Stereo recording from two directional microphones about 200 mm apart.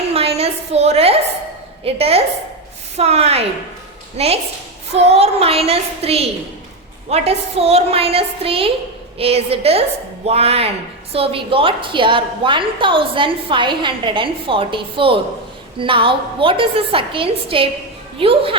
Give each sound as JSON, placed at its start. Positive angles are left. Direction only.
{"t": 0.1, "sound": "a woman's voice", "side_deg": -30}